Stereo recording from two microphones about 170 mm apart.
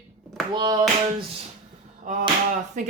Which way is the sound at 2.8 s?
45° right (ahead or behind).